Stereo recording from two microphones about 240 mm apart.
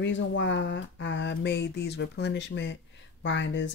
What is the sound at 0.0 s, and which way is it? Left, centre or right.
Speech, left.